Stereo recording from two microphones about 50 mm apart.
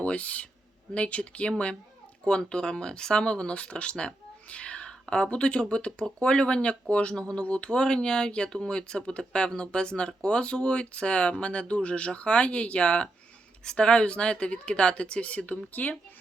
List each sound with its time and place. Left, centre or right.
0.0 s speech: left